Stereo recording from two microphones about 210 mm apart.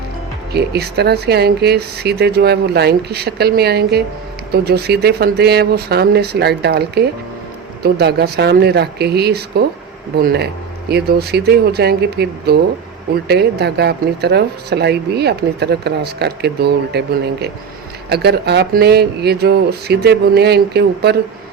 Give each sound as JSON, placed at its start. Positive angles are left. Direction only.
{"t": 0.5, "sound": "speech", "side_deg": -50}
{"t": 18.1, "sound": "speech", "side_deg": -50}